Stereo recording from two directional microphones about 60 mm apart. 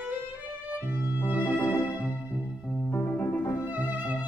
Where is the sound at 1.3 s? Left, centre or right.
Right.